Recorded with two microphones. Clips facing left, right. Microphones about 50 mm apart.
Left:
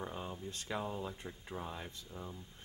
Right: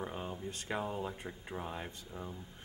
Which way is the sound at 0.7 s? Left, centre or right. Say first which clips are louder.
Right 2 dB; centre.